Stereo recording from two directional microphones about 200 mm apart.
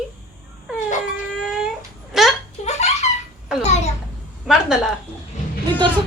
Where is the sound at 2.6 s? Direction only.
35° left (ahead or behind).